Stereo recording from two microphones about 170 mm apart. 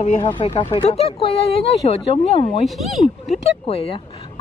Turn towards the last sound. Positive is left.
turn(degrees=35)  # may be behind; listen again after turning